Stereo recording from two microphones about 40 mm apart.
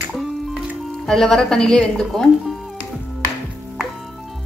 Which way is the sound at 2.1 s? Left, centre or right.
Centre.